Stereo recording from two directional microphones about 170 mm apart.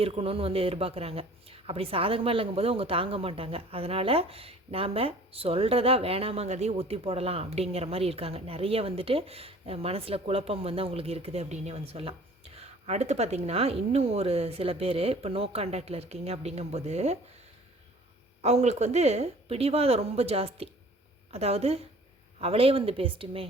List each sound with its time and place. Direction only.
0.0 s speech: 35° right (ahead or behind)
18.4 s speech: 40° right (ahead or behind)